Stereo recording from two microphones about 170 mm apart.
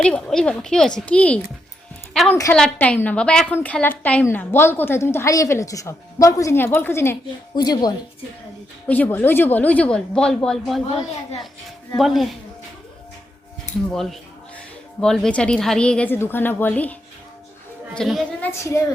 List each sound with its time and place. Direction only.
0.0 s a woman's voice: 5° left (ahead or behind); by 7.9 s 25° left (ahead or behind)
8.9 s a woman's voice: 10° left (ahead or behind)
11.9 s speech: centre (ahead or behind)
13.9 s a woman's voice: centre (ahead or behind)